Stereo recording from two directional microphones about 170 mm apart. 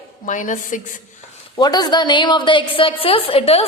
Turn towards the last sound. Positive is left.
turn(degrees=35)  # may be behind; listen again after turning